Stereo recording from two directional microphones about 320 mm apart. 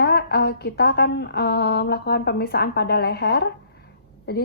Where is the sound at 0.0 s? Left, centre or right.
Left.